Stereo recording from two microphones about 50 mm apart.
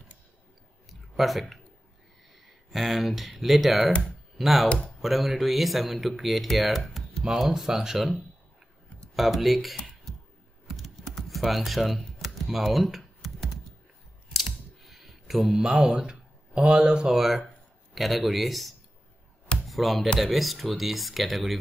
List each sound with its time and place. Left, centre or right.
0.8 s a sound: centre
2.3 s speech: centre
4.6 s speech: left
5.0 s speech: centre
7.2 s speech: centre
9.1 s speech: centre
10.1 s a sound: centre
10.8 s typing: centre
14.3 s a sound: centre
15.4 s speech: centre
17.2 s speech: centre
19.6 s music: centre
20.2 s speech: centre